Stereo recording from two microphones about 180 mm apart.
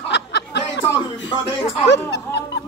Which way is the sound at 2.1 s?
70° left (ahead or behind).